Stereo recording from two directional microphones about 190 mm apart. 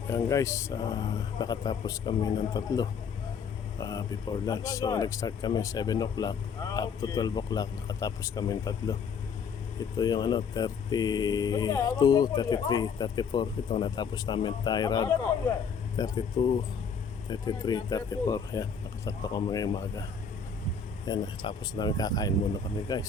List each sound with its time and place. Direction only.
0.1 s speech: 15° left (ahead or behind)
10.0 s speech: 20° left (ahead or behind)
21.1 s speech: 20° left (ahead or behind)